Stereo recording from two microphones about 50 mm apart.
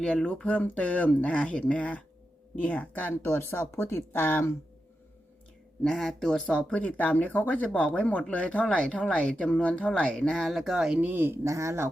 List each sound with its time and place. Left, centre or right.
0.0 s speech: centre
0.4 s speech: left
3.2 s speech: left
5.8 s speech: centre
6.7 s speech: left; by 10.5 s centre
10.5 s speech: centre
11.0 s speech: right
11.4 s speech: right